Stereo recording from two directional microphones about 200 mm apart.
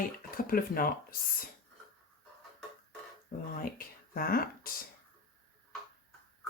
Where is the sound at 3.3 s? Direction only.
45° left (ahead or behind).